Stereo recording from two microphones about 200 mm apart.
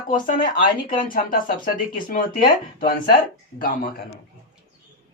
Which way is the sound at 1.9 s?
45° left (ahead or behind).